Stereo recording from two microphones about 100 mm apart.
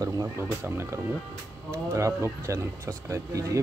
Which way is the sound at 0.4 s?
25° right (ahead or behind).